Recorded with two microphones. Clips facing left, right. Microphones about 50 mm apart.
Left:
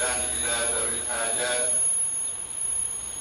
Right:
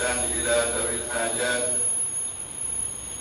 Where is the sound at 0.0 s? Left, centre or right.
Right.